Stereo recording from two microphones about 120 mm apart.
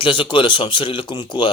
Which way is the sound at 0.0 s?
45° left (ahead or behind).